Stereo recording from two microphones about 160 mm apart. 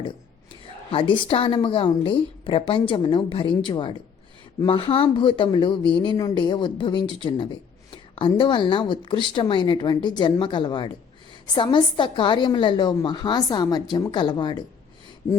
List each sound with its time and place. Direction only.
0.9 s speech: 30° left (ahead or behind)